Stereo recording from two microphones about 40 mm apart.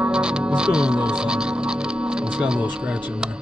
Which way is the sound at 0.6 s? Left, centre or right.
Right.